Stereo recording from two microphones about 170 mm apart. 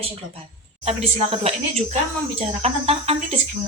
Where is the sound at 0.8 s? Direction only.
35° right (ahead or behind).